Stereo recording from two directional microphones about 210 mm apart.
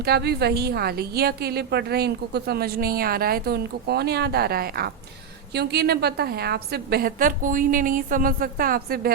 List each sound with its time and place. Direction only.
0.0 s a woman's voice: 50° right (ahead or behind)